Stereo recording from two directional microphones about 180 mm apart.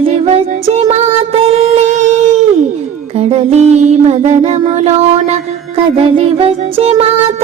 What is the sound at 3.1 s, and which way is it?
Music, 35° right (ahead or behind).